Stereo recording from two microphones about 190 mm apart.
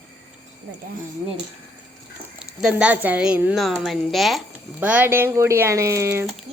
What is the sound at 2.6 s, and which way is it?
A woman's voice, 5° right (ahead or behind).